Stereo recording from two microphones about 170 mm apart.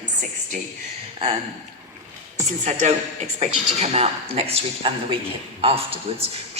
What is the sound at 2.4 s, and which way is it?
A woman's voice, 40° right (ahead or behind).